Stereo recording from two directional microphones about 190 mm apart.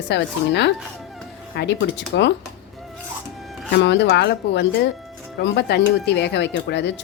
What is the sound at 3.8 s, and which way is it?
Speech, 65° left (ahead or behind).